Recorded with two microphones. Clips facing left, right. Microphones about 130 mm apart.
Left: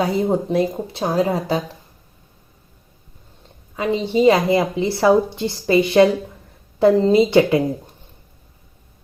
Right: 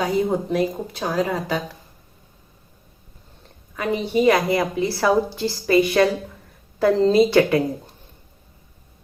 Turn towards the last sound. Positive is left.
turn(degrees=20)  # may be behind; listen again after turning